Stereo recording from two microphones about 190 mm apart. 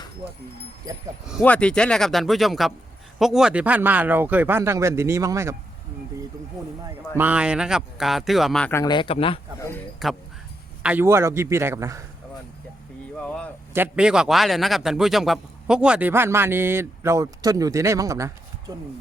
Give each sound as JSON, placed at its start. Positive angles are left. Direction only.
{"t": 1.3, "sound": "a man's voice", "side_deg": 5}
{"t": 7.2, "sound": "speech", "side_deg": -5}
{"t": 8.7, "sound": "a man's voice", "side_deg": 20}
{"t": 10.0, "sound": "speech", "side_deg": 0}
{"t": 10.8, "sound": "a man's voice", "side_deg": -10}
{"t": 13.1, "sound": "a sound", "side_deg": 5}
{"t": 13.7, "sound": "a man's voice", "side_deg": -10}